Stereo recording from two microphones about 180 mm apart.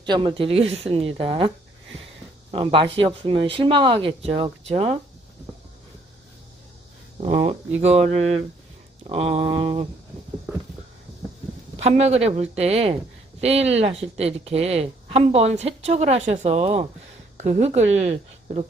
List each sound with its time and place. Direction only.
0.0 s speech: 25° right (ahead or behind)
7.2 s speech: 35° right (ahead or behind)
11.8 s speech: 35° right (ahead or behind)